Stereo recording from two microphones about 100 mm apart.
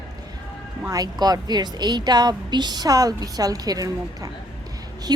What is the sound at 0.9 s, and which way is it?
A woman's voice, 40° right (ahead or behind).